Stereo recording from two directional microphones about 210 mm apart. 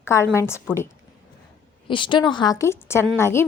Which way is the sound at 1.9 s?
20° left (ahead or behind).